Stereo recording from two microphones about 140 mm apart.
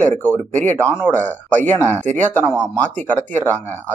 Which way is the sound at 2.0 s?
60° right (ahead or behind).